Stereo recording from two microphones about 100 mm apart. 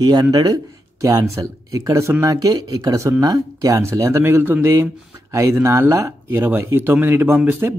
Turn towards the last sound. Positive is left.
turn(degrees=-15)  # may be behind; listen again after turning